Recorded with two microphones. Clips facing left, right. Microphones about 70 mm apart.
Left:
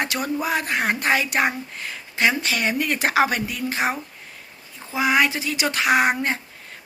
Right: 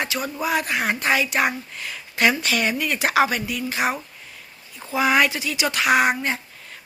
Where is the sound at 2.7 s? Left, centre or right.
Left.